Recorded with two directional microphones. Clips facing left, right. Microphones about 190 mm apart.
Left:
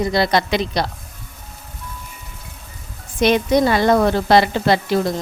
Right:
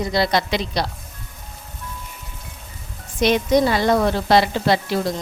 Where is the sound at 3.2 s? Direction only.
55° left (ahead or behind).